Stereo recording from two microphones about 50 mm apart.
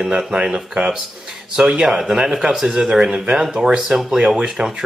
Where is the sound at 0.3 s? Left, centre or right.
Centre.